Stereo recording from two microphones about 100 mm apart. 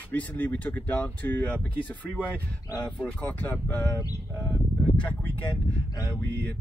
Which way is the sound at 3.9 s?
35° left (ahead or behind).